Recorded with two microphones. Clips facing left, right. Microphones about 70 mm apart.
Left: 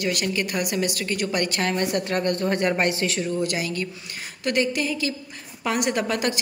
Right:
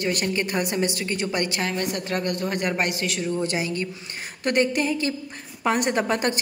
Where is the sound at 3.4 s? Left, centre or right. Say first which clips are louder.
Even; right.